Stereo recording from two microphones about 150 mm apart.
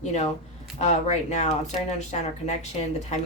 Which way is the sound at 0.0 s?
50° left (ahead or behind).